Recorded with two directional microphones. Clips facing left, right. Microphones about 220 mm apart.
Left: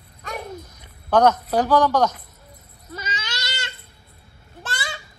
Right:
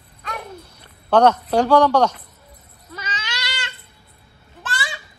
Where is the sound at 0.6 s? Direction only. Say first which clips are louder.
Right 3 dB; 10° left (ahead or behind).